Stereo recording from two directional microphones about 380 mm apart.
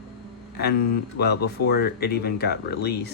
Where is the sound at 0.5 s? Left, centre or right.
Left.